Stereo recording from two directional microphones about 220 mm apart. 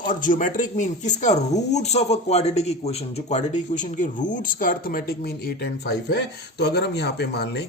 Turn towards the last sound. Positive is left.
turn(degrees=50)  # may be behind; listen again after turning